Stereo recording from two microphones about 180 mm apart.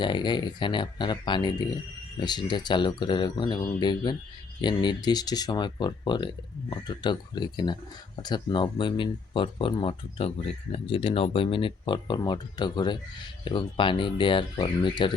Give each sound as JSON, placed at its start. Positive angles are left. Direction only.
{"t": 0.0, "sound": "speech", "side_deg": 25}